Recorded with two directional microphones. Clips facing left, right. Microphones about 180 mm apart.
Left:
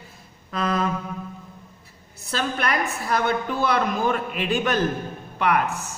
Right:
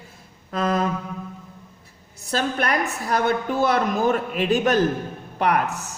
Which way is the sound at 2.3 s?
45° right (ahead or behind).